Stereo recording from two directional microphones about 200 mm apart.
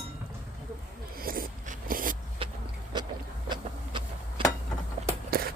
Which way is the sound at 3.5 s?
25° right (ahead or behind).